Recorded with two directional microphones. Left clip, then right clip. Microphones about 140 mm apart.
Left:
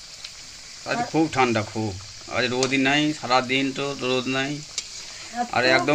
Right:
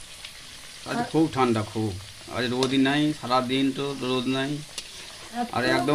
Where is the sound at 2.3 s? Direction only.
5° left (ahead or behind).